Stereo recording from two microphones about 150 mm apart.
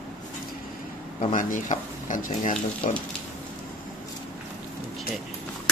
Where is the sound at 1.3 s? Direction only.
60° left (ahead or behind).